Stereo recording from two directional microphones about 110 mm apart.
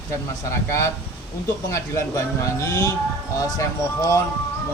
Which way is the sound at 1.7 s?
30° left (ahead or behind).